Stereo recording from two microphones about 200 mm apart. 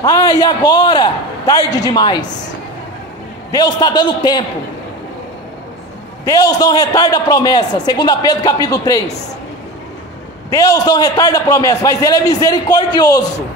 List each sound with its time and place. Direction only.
0.0 s a man's voice: 20° left (ahead or behind)
3.5 s a man's voice: 20° left (ahead or behind)
6.2 s a man's voice: 20° left (ahead or behind)
10.5 s a man's voice: 20° left (ahead or behind)